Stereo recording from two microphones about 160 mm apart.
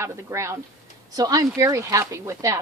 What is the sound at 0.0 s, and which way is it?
A woman's voice, 20° right (ahead or behind).